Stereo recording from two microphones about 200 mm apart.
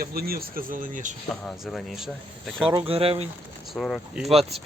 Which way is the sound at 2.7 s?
25° right (ahead or behind).